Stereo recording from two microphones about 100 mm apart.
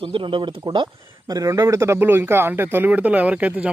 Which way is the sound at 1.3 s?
35° right (ahead or behind).